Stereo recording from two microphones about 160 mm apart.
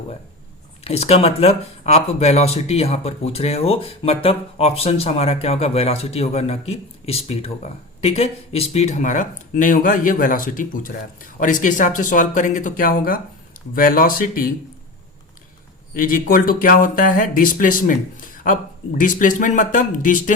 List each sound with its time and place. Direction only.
0.9 s speech: 40° left (ahead or behind); by 14.5 s 65° left (ahead or behind)
16.0 s speech: 60° left (ahead or behind)